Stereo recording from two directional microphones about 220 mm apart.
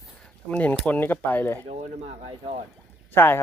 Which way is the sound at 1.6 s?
30° right (ahead or behind).